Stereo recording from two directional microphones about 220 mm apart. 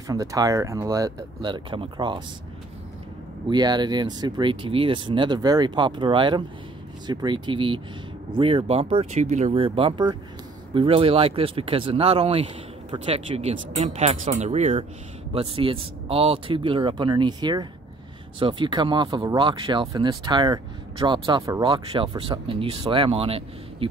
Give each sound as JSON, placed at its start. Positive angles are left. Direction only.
{"t": 0.1, "sound": "speech", "side_deg": -15}
{"t": 3.4, "sound": "speech", "side_deg": -20}